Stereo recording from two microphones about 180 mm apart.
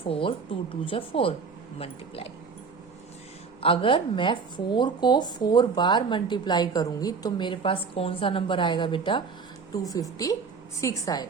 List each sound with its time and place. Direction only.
0.0 s speech: 30° left (ahead or behind)
3.6 s speech: 30° left (ahead or behind)